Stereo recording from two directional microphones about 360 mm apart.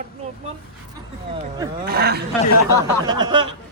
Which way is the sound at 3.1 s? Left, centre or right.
Centre.